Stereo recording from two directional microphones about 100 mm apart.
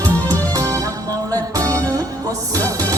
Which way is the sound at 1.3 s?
35° right (ahead or behind).